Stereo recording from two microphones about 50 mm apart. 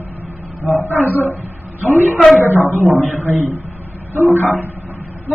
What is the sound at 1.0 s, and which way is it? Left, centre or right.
Speech, left.